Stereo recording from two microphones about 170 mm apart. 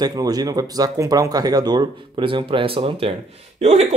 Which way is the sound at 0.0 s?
20° right (ahead or behind).